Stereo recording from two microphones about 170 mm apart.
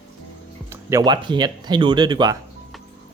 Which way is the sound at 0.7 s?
15° right (ahead or behind).